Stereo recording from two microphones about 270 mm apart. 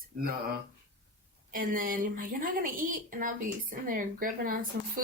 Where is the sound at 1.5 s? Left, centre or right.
Right.